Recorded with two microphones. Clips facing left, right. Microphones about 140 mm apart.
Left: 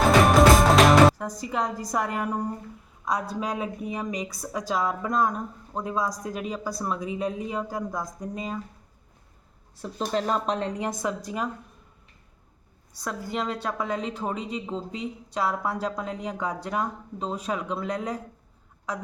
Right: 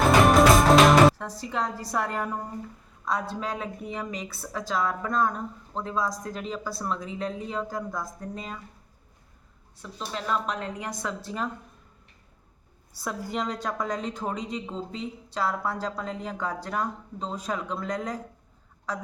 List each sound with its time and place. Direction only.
0.0 s music: centre (ahead or behind)
1.5 s a woman's voice: 10° left (ahead or behind)
9.8 s speech: 45° left (ahead or behind)
10.8 s a woman's voice: 20° left (ahead or behind)
13.0 s a woman's voice: centre (ahead or behind)